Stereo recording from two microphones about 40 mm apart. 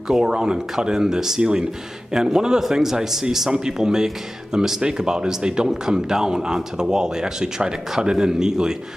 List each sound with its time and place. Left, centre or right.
0.1 s speech: centre